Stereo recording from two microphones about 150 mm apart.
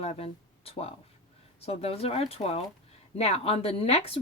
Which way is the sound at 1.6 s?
45° left (ahead or behind).